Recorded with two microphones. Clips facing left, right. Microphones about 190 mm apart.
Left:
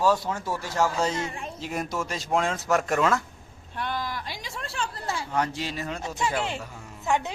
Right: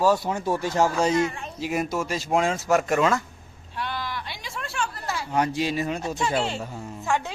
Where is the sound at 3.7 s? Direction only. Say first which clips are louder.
Even; 45° left (ahead or behind); by 5.2 s 30° left (ahead or behind).